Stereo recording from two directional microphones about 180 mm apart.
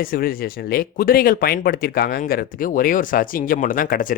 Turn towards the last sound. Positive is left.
turn(degrees=50)  # may be behind; listen again after turning